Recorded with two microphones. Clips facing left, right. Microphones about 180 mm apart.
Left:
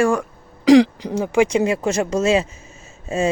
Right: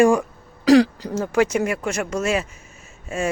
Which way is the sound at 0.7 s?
15° left (ahead or behind).